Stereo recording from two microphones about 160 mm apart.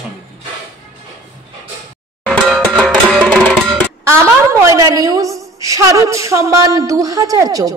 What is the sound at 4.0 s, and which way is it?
A woman's voice, 15° right (ahead or behind).